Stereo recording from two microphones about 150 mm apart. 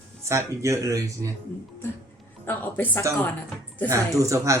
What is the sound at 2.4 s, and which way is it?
Speech, 15° left (ahead or behind).